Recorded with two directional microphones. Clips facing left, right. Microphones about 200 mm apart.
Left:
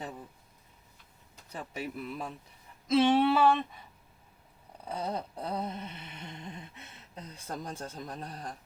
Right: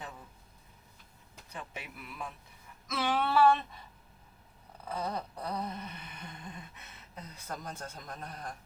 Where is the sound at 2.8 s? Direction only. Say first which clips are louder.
Left 8 dB; 25° left (ahead or behind).